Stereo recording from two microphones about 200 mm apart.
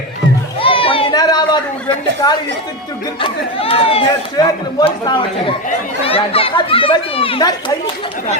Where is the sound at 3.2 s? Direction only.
30° left (ahead or behind).